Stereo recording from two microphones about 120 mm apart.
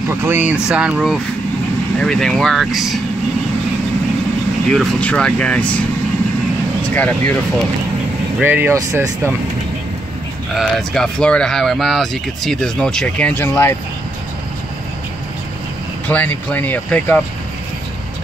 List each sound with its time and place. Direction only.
0.1 s speech: 20° right (ahead or behind); by 3.0 s centre (ahead or behind)
4.6 s speech: 5° left (ahead or behind)
6.9 s speech: 15° left (ahead or behind)
8.4 s speech: 15° right (ahead or behind)
10.5 s speech: centre (ahead or behind)
13.3 s speech: 20° left (ahead or behind)
16.1 s speech: 15° left (ahead or behind)